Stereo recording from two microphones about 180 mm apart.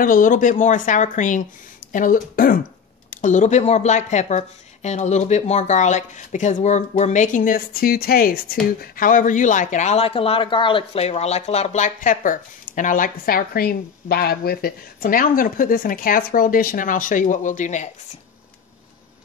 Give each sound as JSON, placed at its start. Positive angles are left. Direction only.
{"t": 0.0, "sound": "speech", "side_deg": 50}